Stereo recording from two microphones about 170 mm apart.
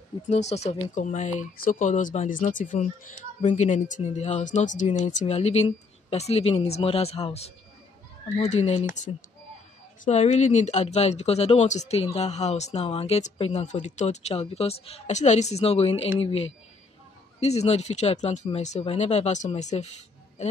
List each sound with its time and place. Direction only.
0.3 s speech: 40° left (ahead or behind)